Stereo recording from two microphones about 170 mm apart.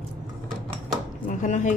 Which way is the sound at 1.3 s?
45° left (ahead or behind).